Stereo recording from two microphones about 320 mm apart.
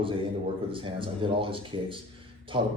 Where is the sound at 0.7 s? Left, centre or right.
Centre.